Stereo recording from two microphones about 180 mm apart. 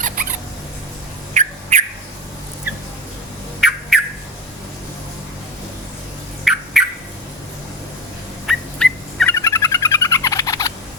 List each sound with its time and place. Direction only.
1.3 s bird: 40° right (ahead or behind)
3.6 s squawk: centre (ahead or behind)
6.4 s squawk: 5° right (ahead or behind)
8.4 s dog: 5° left (ahead or behind)
9.3 s a sound: 15° left (ahead or behind)